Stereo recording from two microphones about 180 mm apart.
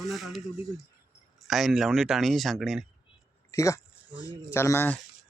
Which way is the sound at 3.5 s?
15° left (ahead or behind).